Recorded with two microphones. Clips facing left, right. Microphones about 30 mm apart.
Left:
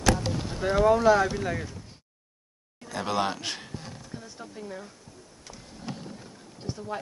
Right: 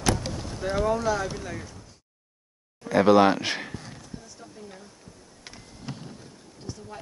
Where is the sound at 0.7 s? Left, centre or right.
Centre.